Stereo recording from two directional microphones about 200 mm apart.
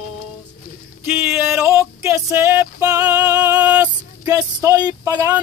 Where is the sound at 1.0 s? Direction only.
10° right (ahead or behind).